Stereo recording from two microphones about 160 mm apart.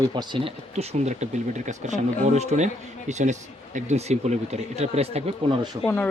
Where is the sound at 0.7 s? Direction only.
40° right (ahead or behind).